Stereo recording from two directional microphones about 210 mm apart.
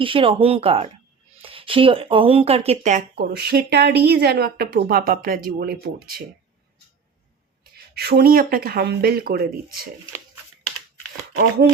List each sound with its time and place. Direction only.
0.0 s speech: 25° right (ahead or behind)
3.2 s a woman's voice: 50° right (ahead or behind)
7.9 s a woman's voice: 50° right (ahead or behind)